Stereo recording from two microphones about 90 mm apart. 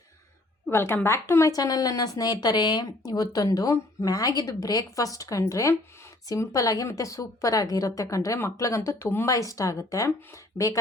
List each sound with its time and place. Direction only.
0.7 s speech: 25° left (ahead or behind)
1.5 s a woman's voice: 40° left (ahead or behind)
9.3 s a woman's voice: 40° left (ahead or behind)